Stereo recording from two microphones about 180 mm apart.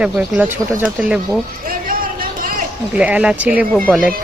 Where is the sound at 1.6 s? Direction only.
50° right (ahead or behind).